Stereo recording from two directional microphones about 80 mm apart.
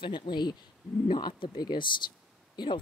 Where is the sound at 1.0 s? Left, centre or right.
Left.